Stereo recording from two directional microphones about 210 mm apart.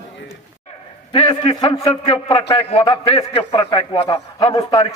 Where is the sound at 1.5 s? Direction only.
20° left (ahead or behind).